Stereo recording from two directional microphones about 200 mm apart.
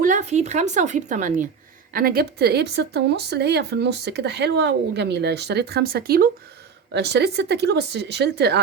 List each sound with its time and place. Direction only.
0.0 s speech: 35° right (ahead or behind); by 8.5 s 55° right (ahead or behind)